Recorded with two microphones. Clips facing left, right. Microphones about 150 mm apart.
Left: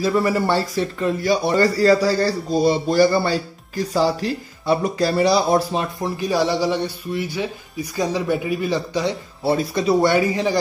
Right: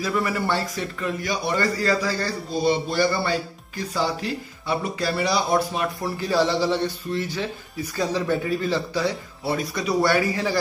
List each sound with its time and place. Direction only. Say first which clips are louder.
0.0 s a man's voice: left 6 dB; 35° left (ahead or behind)
6.0 s speech: left 1 dB; 15° left (ahead or behind)